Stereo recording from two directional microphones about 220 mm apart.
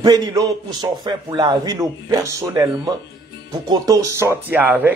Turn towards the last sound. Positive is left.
turn(degrees=-10)  # may be behind; listen again after turning